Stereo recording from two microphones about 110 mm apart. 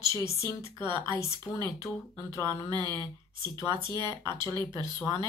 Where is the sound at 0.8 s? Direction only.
45° right (ahead or behind).